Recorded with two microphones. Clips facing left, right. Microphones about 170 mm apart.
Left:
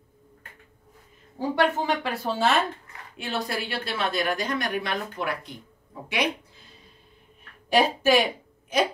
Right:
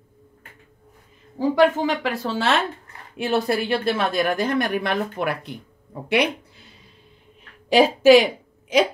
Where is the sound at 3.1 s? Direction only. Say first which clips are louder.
Right 8 dB; 55° right (ahead or behind).